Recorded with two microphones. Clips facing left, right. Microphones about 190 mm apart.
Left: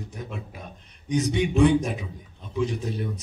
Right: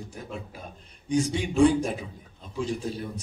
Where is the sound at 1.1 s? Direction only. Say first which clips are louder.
Left 2 dB; 30° right (ahead or behind).